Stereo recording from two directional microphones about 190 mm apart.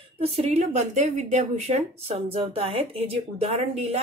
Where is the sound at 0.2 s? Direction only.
35° right (ahead or behind).